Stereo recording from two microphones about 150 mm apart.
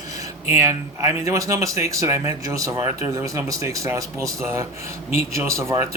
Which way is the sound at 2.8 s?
45° left (ahead or behind).